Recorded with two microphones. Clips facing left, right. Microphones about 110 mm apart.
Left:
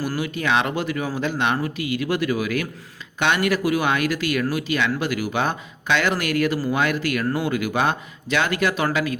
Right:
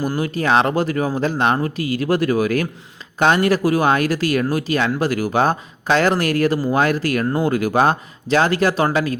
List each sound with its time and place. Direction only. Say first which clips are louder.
0.2 s speech: right 5 dB; 40° right (ahead or behind)